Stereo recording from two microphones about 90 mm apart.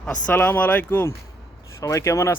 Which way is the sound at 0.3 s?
20° left (ahead or behind).